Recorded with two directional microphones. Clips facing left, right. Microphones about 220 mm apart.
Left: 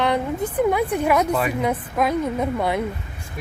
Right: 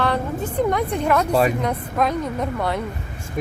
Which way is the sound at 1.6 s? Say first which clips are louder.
Even; 5° left (ahead or behind).